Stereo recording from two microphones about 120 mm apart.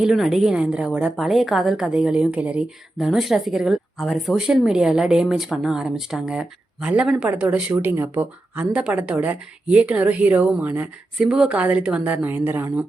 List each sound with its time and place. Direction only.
0.0 s a woman's voice: centre (ahead or behind)